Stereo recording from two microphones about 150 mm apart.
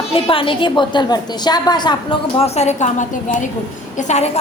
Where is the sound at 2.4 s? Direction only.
45° left (ahead or behind).